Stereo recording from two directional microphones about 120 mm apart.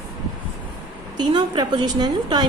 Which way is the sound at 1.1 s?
35° right (ahead or behind).